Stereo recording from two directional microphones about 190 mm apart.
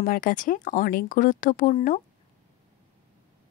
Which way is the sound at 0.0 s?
45° left (ahead or behind).